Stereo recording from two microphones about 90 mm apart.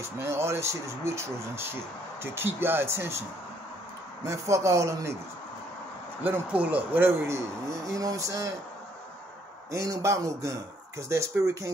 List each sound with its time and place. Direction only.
0.0 s speech: 30° right (ahead or behind)
4.3 s speech: 35° right (ahead or behind)
6.2 s speech: 15° right (ahead or behind)
7.2 s speech: 35° right (ahead or behind)
9.7 s speech: 35° right (ahead or behind)